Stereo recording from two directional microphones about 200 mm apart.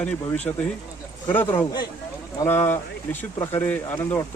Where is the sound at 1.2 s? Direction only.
10° left (ahead or behind).